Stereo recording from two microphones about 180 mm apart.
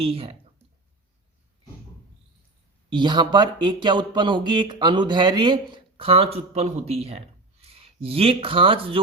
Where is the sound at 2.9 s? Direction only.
25° right (ahead or behind).